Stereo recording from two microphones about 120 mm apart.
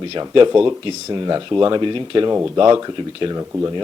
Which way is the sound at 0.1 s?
45° right (ahead or behind).